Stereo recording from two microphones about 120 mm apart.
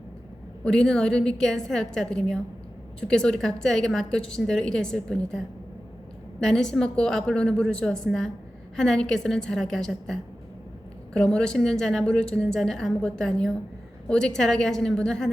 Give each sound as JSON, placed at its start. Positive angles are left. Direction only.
{"t": 0.6, "sound": "a woman's voice", "side_deg": 5}
{"t": 6.4, "sound": "a woman's voice", "side_deg": 5}